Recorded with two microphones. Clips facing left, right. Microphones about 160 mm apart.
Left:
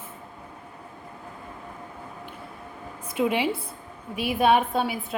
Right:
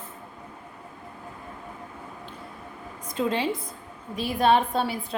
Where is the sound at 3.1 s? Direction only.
10° left (ahead or behind).